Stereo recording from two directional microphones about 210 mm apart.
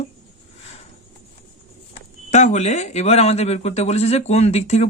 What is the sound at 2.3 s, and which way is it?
Speech, 35° left (ahead or behind).